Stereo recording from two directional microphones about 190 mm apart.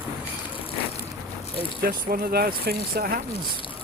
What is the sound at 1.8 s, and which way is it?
Speech, 50° right (ahead or behind).